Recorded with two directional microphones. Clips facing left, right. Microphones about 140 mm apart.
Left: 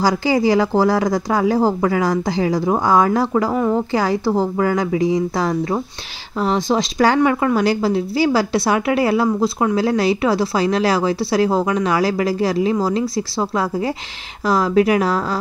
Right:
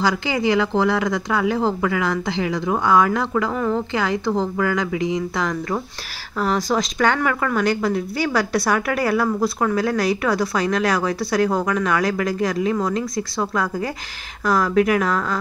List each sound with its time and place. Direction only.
0.0 s a woman's voice: 35° left (ahead or behind)
3.5 s a woman's voice: 15° left (ahead or behind)
3.9 s a woman's voice: 35° left (ahead or behind)